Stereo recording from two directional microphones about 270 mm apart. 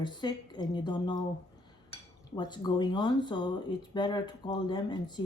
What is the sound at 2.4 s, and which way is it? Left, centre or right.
Speech, centre.